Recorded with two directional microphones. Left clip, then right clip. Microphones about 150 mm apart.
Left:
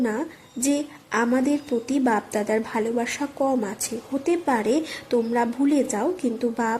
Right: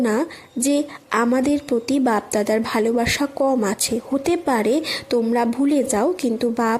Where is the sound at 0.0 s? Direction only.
30° right (ahead or behind).